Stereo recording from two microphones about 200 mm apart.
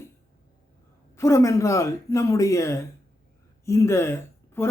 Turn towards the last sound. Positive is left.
turn(degrees=15)  # may be behind; listen again after turning